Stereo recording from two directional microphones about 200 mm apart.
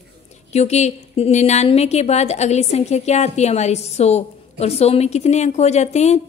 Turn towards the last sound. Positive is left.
turn(degrees=35)  # may be behind; listen again after turning